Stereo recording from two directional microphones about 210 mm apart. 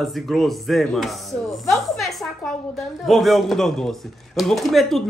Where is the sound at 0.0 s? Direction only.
Centre (ahead or behind).